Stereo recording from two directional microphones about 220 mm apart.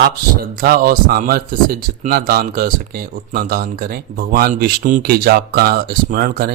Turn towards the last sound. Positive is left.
turn(degrees=-40)  # may be behind; listen again after turning